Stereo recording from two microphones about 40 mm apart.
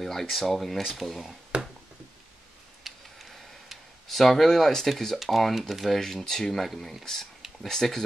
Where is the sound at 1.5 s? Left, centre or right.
Right.